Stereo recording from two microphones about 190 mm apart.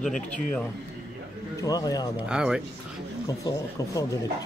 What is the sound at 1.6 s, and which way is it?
Speech, 20° left (ahead or behind).